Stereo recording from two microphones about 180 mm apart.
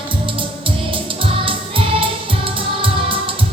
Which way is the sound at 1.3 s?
30° right (ahead or behind).